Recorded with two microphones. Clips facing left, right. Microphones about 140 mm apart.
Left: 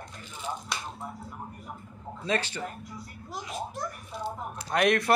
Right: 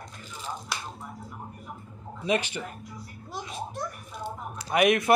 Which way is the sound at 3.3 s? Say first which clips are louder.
Even; centre (ahead or behind).